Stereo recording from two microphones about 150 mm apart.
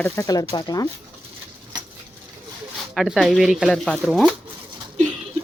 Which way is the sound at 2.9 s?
Centre (ahead or behind).